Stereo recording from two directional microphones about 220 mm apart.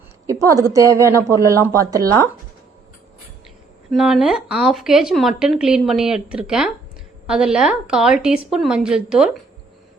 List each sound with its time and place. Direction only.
0.3 s speech: 15° right (ahead or behind)
3.9 s a woman's voice: centre (ahead or behind)